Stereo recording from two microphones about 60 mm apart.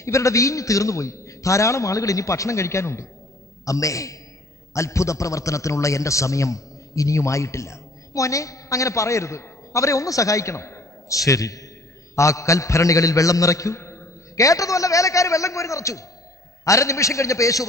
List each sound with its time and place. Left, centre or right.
0.0 s a man's voice: left
3.6 s a man's voice: left